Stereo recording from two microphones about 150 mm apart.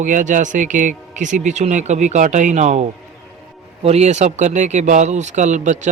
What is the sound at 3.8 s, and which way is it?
A man's voice, 45° right (ahead or behind).